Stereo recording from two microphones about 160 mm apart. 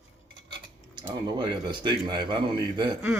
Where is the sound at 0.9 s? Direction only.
30° right (ahead or behind).